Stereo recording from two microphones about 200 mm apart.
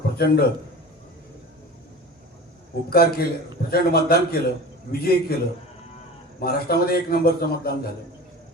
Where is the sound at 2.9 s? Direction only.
50° left (ahead or behind).